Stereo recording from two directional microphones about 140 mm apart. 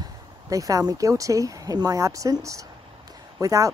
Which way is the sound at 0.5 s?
25° right (ahead or behind).